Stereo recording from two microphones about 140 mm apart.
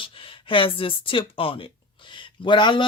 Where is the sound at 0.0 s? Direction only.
40° left (ahead or behind).